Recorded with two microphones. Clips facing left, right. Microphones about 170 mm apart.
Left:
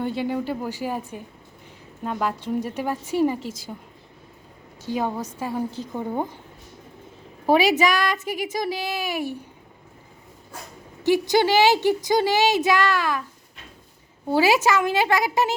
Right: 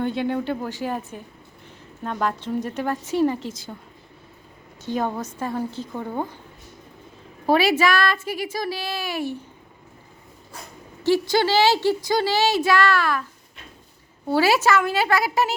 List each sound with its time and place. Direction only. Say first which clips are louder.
0.0 s a woman's voice: right 1 dB; 5° left (ahead or behind)
4.9 s a woman's voice: right 1 dB; 10° left (ahead or behind)
7.4 s a woman's voice: even; 15° left (ahead or behind)
11.0 s a woman's voice: left 1 dB; 15° left (ahead or behind)
14.3 s a woman's voice: even; 15° left (ahead or behind)